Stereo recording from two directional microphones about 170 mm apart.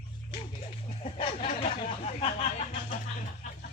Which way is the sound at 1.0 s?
40° left (ahead or behind).